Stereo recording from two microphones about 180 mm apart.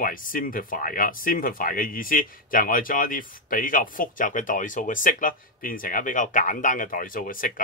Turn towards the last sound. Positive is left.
turn(degrees=50)  # may be behind; listen again after turning